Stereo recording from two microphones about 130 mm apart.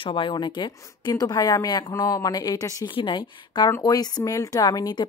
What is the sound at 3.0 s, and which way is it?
A woman's voice, 40° left (ahead or behind).